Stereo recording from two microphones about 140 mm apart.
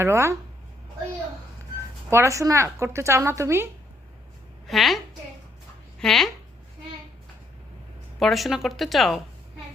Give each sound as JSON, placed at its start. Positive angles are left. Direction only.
{"t": 0.0, "sound": "speech", "side_deg": -20}
{"t": 2.0, "sound": "speech", "side_deg": -20}
{"t": 4.6, "sound": "a woman's voice", "side_deg": 0}
{"t": 6.0, "sound": "a woman's voice", "side_deg": 5}
{"t": 8.2, "sound": "a woman's voice", "side_deg": 0}